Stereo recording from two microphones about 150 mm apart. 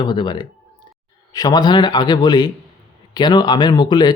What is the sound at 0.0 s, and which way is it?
Speech, 30° left (ahead or behind).